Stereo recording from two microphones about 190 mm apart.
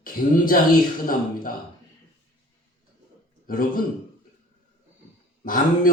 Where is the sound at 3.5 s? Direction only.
50° left (ahead or behind).